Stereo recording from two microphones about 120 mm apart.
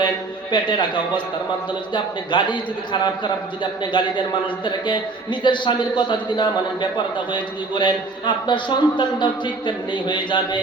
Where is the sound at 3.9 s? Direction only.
40° left (ahead or behind).